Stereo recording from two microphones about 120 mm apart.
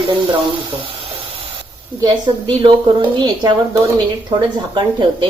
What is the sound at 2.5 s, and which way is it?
Speech, 45° right (ahead or behind).